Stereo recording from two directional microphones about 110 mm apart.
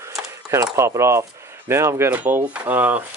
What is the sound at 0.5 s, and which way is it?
Speech, 25° right (ahead or behind).